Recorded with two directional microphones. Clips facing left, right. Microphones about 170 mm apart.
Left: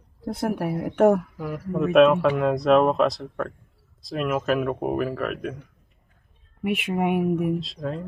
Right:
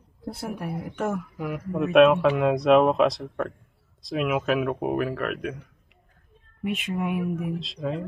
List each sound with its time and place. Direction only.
0.2 s a woman's voice: 65° left (ahead or behind)
1.7 s speech: centre (ahead or behind)
6.6 s a woman's voice: 60° left (ahead or behind)
7.5 s speech: centre (ahead or behind)